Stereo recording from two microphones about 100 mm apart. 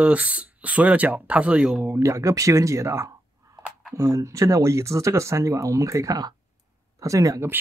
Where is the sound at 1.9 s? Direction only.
30° right (ahead or behind).